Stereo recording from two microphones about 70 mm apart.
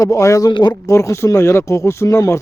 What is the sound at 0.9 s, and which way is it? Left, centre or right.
Speech, left.